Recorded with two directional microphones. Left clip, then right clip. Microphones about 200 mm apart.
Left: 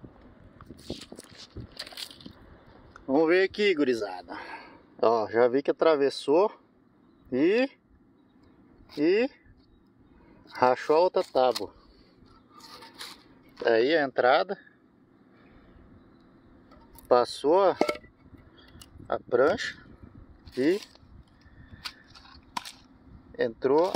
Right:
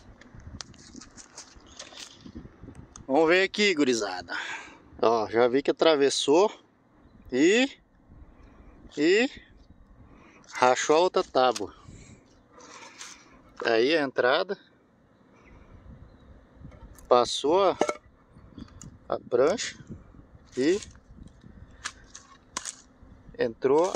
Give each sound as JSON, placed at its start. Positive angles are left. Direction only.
{"t": 1.8, "sound": "a sound", "side_deg": 45}
{"t": 2.9, "sound": "speech", "side_deg": -35}
{"t": 4.9, "sound": "speech", "side_deg": -15}
{"t": 8.9, "sound": "speech", "side_deg": -30}
{"t": 10.5, "sound": "speech", "side_deg": -30}
{"t": 13.6, "sound": "speech", "side_deg": -15}
{"t": 17.1, "sound": "speech", "side_deg": -20}
{"t": 18.6, "sound": "a sound", "side_deg": -5}
{"t": 20.5, "sound": "speech", "side_deg": -10}
{"t": 23.3, "sound": "speech", "side_deg": -10}